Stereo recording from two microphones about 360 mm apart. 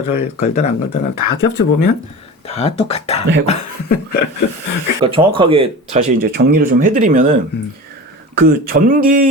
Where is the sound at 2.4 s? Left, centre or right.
Centre.